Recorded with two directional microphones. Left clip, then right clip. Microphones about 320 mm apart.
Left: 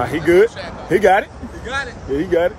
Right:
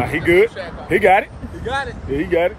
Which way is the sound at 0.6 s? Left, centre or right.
Right.